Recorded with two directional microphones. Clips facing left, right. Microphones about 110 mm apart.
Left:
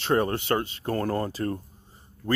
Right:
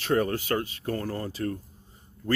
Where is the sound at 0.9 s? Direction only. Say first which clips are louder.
Left 7 dB; 45° left (ahead or behind).